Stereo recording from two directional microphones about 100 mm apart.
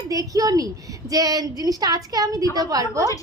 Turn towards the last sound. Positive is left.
turn(degrees=-35)  # may be behind; listen again after turning